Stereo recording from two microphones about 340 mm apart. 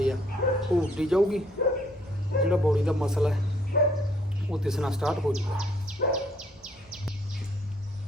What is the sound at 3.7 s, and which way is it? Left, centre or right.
Dog, left.